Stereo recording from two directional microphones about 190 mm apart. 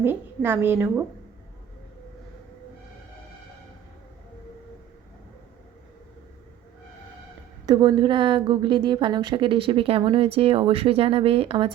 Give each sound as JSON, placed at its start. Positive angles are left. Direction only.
{"t": 0.0, "sound": "a woman's voice", "side_deg": -10}
{"t": 7.7, "sound": "a woman's voice", "side_deg": -25}